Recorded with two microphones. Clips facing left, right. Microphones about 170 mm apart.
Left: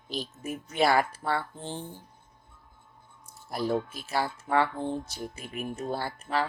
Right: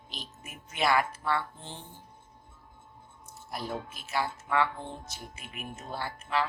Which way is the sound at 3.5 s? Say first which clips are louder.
Left 8 dB; 35° left (ahead or behind).